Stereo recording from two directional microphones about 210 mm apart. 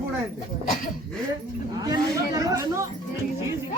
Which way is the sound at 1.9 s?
15° right (ahead or behind).